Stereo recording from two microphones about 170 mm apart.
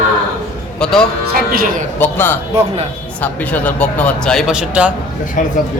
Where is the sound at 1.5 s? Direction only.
55° right (ahead or behind).